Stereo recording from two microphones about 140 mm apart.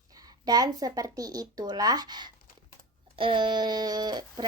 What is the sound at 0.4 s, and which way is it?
Speech, 25° right (ahead or behind).